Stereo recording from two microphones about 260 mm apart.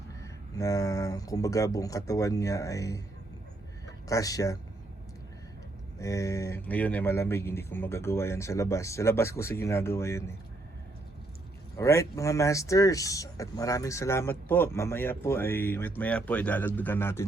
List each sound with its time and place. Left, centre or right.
0.2 s speech: centre
4.1 s speech: centre
6.0 s speech: centre
11.8 s speech: centre